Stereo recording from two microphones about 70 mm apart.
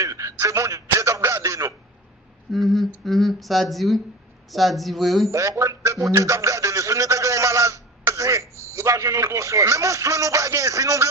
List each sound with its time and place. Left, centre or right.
0.0 s a sound: right
2.5 s speech: centre
5.3 s a man's voice: right